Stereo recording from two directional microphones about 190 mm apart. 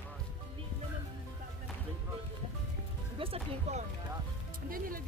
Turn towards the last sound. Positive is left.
turn(degrees=-30)  # may be behind; listen again after turning